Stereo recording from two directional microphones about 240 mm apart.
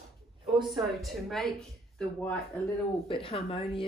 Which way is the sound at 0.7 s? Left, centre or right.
Centre.